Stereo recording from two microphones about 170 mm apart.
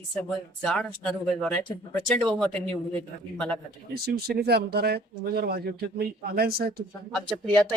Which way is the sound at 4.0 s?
65° right (ahead or behind).